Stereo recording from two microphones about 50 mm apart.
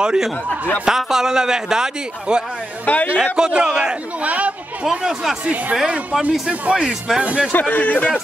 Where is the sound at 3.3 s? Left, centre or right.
Centre.